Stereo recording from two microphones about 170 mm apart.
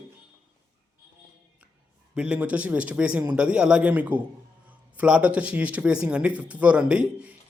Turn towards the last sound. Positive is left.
turn(degrees=-5)  # may be behind; listen again after turning